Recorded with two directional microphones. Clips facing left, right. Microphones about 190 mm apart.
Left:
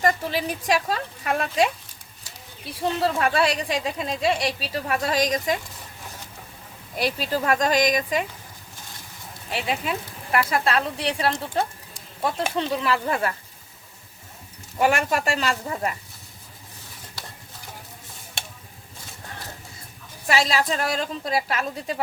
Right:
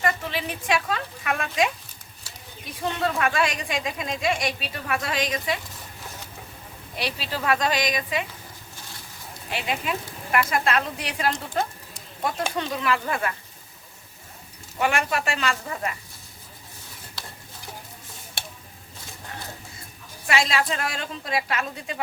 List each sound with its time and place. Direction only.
0.0 s speech: 40° left (ahead or behind)
6.9 s a woman's voice: 45° left (ahead or behind)
9.5 s speech: 35° left (ahead or behind)
14.8 s speech: 40° left (ahead or behind)
20.2 s speech: 35° left (ahead or behind)